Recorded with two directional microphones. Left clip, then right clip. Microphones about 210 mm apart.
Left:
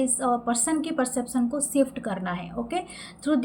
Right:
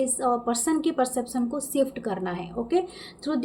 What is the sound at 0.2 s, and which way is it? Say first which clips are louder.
A woman's voice: even; 25° right (ahead or behind).